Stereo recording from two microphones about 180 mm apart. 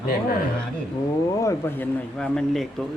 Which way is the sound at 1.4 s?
15° left (ahead or behind).